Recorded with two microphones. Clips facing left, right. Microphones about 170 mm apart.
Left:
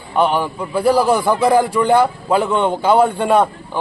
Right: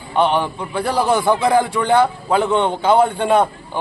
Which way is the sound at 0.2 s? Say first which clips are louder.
Left 1 dB; 5° left (ahead or behind).